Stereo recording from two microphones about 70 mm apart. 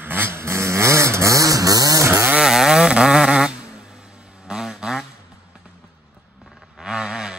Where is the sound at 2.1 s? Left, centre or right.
Right.